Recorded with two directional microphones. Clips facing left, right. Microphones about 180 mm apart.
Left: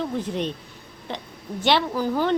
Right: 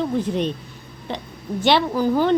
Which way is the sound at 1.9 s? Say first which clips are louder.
Right 5 dB; 30° right (ahead or behind).